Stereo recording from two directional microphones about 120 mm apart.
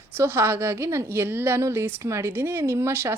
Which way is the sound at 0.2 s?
20° right (ahead or behind).